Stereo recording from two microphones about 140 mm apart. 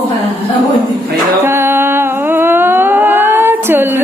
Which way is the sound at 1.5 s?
15° right (ahead or behind).